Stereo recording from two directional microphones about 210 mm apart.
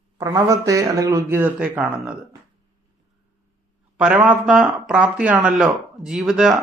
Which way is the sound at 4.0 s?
5° right (ahead or behind).